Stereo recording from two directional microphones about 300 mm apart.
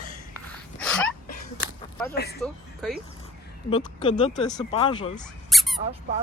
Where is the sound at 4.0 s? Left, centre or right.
Centre.